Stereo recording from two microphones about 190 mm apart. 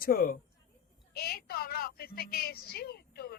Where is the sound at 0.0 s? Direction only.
50° left (ahead or behind).